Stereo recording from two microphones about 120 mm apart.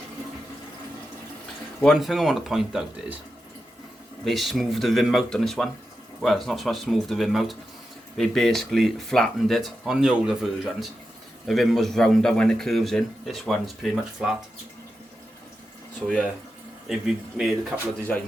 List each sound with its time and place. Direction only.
1.8 s speech: centre (ahead or behind)
4.2 s speech: centre (ahead or behind)
11.4 s speech: centre (ahead or behind)
16.0 s speech: 5° right (ahead or behind)